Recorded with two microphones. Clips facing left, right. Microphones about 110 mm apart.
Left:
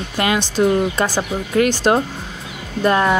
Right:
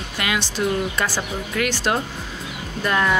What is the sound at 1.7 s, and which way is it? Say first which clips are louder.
Speech: left 6 dB; 25° left (ahead or behind).